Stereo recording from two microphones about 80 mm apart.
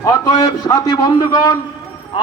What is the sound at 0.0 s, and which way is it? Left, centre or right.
A man's voice, left.